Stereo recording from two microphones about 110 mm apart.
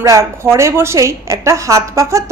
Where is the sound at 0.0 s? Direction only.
25° right (ahead or behind).